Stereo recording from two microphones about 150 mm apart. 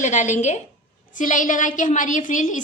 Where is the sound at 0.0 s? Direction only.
50° left (ahead or behind).